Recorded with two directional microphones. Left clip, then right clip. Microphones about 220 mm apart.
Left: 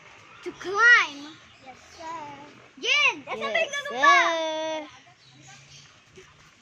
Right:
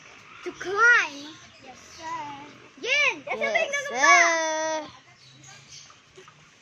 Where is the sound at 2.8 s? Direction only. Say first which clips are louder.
Left 1 dB; 35° left (ahead or behind).